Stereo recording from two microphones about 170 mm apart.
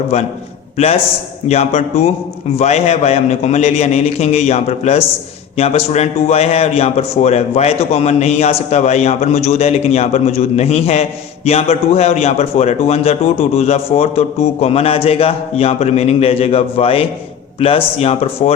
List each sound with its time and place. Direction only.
1.5 s a man's voice: 40° left (ahead or behind)